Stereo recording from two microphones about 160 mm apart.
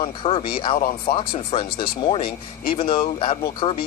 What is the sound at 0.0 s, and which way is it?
Speech, 35° left (ahead or behind).